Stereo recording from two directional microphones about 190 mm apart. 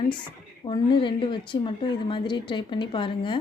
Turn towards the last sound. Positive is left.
turn(degrees=25)  # may be behind; listen again after turning